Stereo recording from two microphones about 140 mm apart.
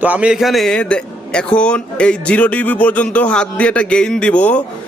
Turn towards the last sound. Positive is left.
turn(degrees=10)  # may be behind; listen again after turning